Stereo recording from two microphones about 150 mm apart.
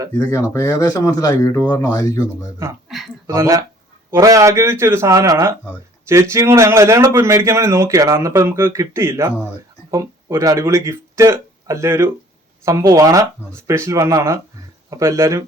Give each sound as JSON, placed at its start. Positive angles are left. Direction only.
{"t": 0.3, "sound": "speech", "side_deg": 20}
{"t": 3.2, "sound": "a man's voice", "side_deg": -20}